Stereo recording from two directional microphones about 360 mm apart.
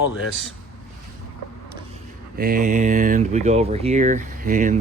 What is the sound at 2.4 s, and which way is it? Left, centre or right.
Speech, right.